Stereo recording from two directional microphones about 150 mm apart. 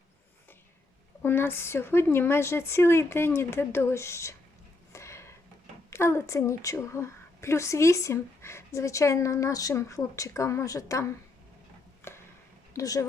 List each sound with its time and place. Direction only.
1.2 s a woman's voice: 15° left (ahead or behind)
4.9 s a sound: 20° left (ahead or behind)
5.9 s a woman's voice: 15° left (ahead or behind)
12.7 s a woman's voice: 20° left (ahead or behind)